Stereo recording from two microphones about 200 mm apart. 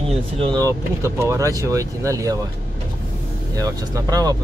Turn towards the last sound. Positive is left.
turn(degrees=-20)  # may be behind; listen again after turning